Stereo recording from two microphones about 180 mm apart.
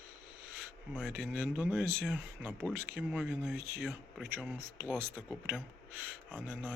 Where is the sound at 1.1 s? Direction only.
10° right (ahead or behind).